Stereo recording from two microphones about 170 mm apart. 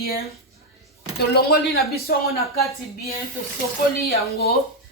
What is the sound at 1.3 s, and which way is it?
Speech, 65° left (ahead or behind).